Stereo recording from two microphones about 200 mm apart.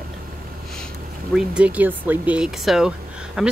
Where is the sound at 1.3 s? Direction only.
5° right (ahead or behind).